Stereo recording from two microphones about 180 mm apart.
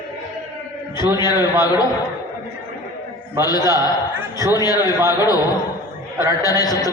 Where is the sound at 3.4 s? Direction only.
20° left (ahead or behind).